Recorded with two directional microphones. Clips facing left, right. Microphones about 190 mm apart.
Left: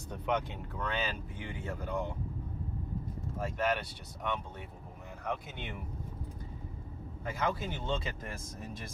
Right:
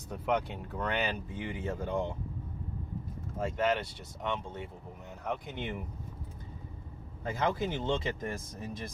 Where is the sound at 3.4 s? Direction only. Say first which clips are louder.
Right 3 dB; 25° right (ahead or behind).